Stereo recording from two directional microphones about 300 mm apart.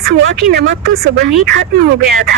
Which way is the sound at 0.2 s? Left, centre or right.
Right.